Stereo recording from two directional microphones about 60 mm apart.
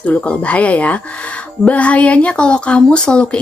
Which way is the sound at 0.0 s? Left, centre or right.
Left.